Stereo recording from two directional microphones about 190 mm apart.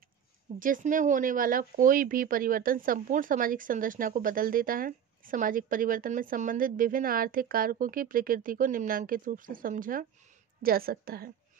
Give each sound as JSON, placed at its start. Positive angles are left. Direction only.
{"t": 0.6, "sound": "speech", "side_deg": -45}